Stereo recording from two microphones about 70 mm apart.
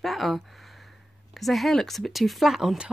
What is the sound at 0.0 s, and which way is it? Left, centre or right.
Speech, centre.